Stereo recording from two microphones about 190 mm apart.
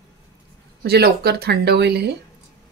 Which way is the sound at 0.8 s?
55° right (ahead or behind).